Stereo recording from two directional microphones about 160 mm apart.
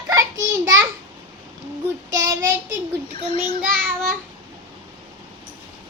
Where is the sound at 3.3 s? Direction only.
35° left (ahead or behind).